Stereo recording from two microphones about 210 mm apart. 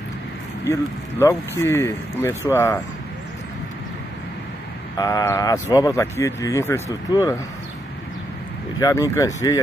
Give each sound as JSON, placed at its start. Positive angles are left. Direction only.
{"t": 1.2, "sound": "speech", "side_deg": 10}
{"t": 4.9, "sound": "speech", "side_deg": 15}
{"t": 8.7, "sound": "speech", "side_deg": 15}